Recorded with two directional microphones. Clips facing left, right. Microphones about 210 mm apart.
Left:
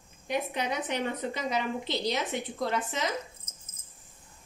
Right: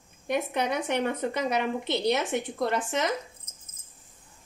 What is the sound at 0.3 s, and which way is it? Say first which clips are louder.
A woman's voice: right 3 dB; 60° right (ahead or behind).